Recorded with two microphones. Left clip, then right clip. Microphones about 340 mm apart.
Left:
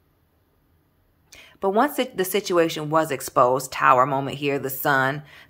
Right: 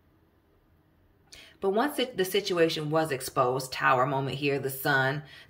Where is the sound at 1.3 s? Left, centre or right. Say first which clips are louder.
Left 5 dB; centre.